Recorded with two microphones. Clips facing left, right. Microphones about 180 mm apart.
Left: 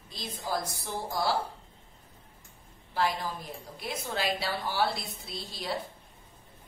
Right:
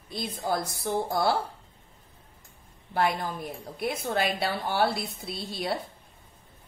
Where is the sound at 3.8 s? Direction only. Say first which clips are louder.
Right 6 dB; 55° right (ahead or behind).